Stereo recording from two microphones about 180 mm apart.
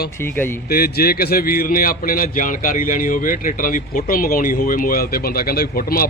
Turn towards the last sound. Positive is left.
turn(degrees=55)  # may be behind; listen again after turning